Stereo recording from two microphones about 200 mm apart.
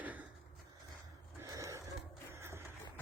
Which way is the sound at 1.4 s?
15° right (ahead or behind).